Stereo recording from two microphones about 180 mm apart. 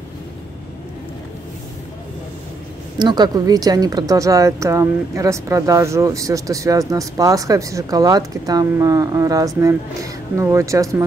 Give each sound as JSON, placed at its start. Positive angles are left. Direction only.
{"t": 3.0, "sound": "speech", "side_deg": -25}